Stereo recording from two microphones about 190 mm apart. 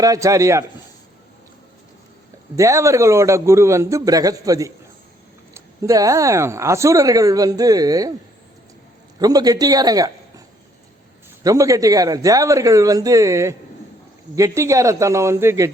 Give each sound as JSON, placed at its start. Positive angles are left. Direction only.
{"t": 0.0, "sound": "speech", "side_deg": -15}
{"t": 2.6, "sound": "speech", "side_deg": -15}
{"t": 9.1, "sound": "a man's voice", "side_deg": -20}
{"t": 11.4, "sound": "speech", "side_deg": -15}